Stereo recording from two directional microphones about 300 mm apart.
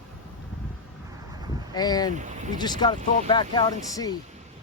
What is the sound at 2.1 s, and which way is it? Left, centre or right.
Speech, right.